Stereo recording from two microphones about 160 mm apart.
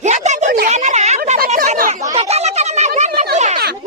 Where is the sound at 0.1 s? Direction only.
50° right (ahead or behind).